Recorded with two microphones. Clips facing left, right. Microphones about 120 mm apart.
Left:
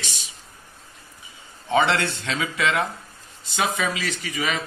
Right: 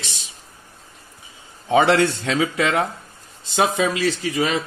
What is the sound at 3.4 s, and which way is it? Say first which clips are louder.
Speech: right 5 dB; 90° right.